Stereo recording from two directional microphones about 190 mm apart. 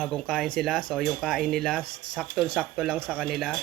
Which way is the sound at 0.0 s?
5° left (ahead or behind).